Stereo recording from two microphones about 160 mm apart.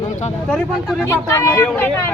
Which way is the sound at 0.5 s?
5° left (ahead or behind).